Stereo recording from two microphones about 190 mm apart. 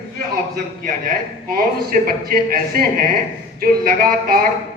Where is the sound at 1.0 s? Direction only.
50° right (ahead or behind).